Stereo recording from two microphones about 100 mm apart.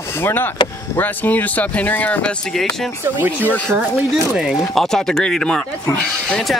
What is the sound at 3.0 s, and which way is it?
Speech, 20° right (ahead or behind).